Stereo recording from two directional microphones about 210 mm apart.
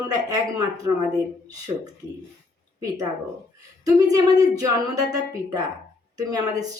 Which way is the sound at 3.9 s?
15° right (ahead or behind).